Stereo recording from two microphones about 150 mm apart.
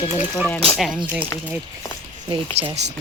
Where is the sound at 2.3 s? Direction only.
35° right (ahead or behind).